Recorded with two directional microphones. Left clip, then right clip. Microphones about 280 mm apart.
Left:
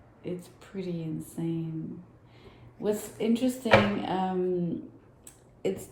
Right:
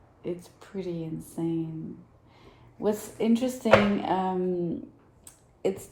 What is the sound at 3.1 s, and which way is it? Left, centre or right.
A woman's voice, centre.